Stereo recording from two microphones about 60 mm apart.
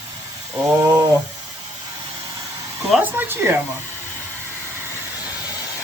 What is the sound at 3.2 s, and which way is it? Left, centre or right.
Speech, right.